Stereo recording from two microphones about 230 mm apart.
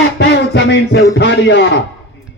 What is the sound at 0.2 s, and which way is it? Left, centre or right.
Music, left.